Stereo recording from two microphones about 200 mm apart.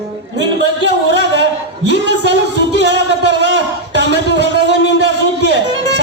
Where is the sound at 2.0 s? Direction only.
60° right (ahead or behind).